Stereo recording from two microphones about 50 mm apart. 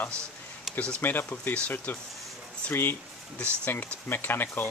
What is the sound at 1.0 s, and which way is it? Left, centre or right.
Speech, left.